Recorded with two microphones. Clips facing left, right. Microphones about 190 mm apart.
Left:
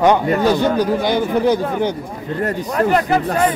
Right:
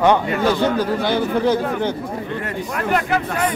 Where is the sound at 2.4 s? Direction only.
35° left (ahead or behind).